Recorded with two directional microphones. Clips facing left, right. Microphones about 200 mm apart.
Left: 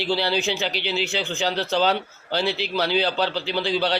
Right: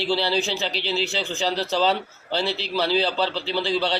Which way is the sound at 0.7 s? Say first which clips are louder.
Even; 30° right (ahead or behind).